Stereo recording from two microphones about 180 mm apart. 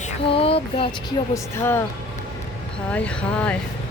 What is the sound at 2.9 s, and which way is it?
Speech, 5° left (ahead or behind).